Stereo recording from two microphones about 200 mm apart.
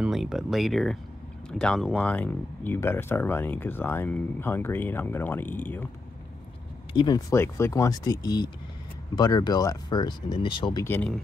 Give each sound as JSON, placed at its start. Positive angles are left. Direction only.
{"t": 0.0, "sound": "speech", "side_deg": 0}
{"t": 6.9, "sound": "speech", "side_deg": 20}
{"t": 10.8, "sound": "speech", "side_deg": 10}